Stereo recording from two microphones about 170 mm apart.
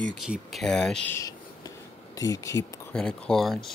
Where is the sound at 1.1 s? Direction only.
20° left (ahead or behind).